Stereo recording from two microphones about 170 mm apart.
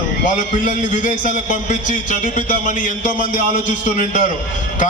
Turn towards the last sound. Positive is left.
turn(degrees=50)  # may be behind; listen again after turning